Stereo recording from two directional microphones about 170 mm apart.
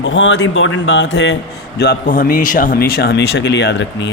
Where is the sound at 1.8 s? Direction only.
60° left (ahead or behind).